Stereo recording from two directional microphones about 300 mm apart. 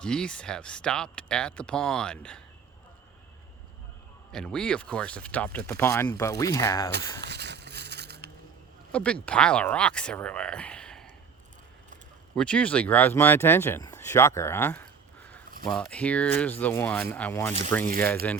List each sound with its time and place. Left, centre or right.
0.0 s speech: centre
4.3 s speech: centre
7.2 s crushing: right
8.9 s speech: centre
12.4 s speech: centre